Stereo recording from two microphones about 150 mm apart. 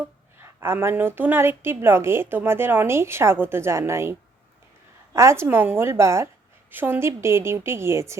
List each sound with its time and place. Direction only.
0.4 s a woman's voice: 15° right (ahead or behind)
5.1 s a woman's voice: 20° right (ahead or behind)